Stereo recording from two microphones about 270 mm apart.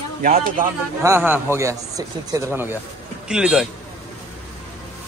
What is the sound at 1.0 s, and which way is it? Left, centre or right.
A man's voice, centre.